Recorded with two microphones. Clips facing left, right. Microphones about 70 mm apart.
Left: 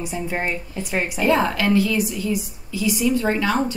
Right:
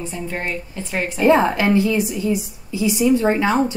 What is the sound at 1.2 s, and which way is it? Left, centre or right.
A woman's voice, right.